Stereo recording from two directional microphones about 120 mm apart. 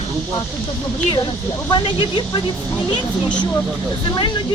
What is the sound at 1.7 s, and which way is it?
Speech, 40° left (ahead or behind).